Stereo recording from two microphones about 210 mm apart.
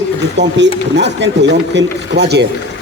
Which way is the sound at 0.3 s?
55° right (ahead or behind).